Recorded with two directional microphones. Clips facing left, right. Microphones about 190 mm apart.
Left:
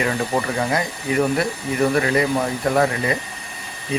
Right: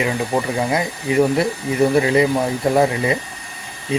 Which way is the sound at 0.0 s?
15° right (ahead or behind).